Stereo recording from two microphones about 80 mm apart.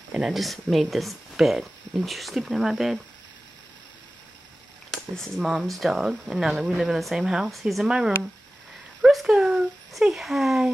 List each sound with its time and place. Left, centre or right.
0.1 s speech: centre
4.9 s speech: centre
9.0 s a sound: centre